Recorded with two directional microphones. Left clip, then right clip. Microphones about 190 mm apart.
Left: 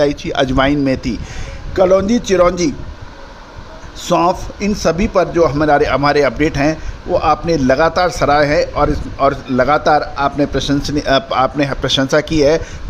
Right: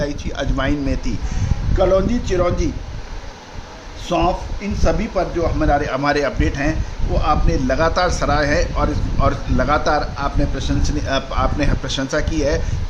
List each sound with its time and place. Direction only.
0.0 s a man's voice: 40° left (ahead or behind)
1.8 s a man's voice: 55° left (ahead or behind)
4.0 s a man's voice: 60° left (ahead or behind); by 12.6 s 45° left (ahead or behind)